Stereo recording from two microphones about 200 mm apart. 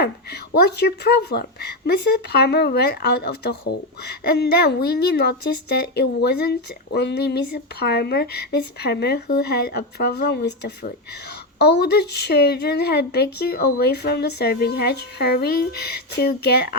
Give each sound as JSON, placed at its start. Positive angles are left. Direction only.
{"t": 0.5, "sound": "speech", "side_deg": 55}